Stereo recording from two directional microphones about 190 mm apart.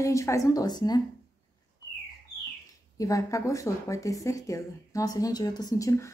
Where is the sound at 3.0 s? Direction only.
15° left (ahead or behind).